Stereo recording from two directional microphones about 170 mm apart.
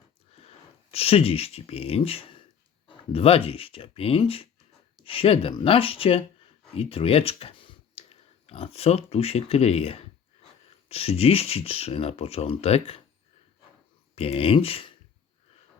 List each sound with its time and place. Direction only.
0.3 s speech: 35° left (ahead or behind)
14.2 s speech: 35° left (ahead or behind)